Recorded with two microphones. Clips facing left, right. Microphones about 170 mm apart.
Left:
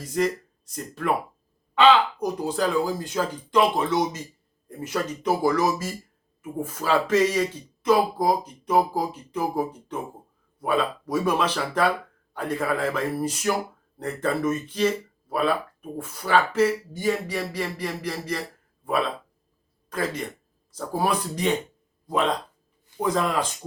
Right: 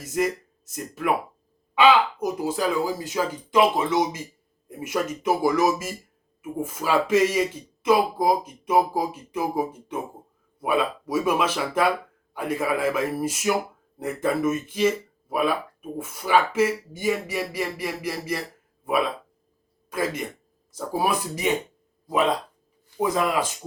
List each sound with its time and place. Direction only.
0.0 s speech: 5° right (ahead or behind)
19.9 s speech: 10° right (ahead or behind)